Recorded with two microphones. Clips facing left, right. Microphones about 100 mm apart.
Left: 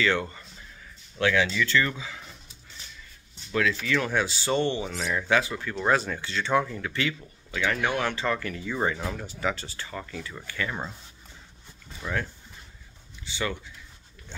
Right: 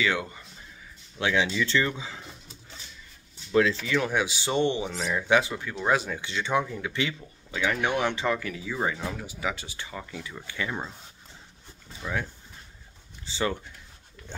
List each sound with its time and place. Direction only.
0.0 s speech: 10° right (ahead or behind)
3.8 s speech: 15° right (ahead or behind)
8.4 s speech: 5° right (ahead or behind)
12.0 s speech: 10° right (ahead or behind)
13.2 s speech: 35° right (ahead or behind)